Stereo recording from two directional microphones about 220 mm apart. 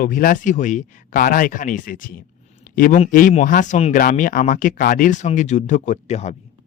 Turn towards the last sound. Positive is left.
turn(degrees=30)  # may be behind; listen again after turning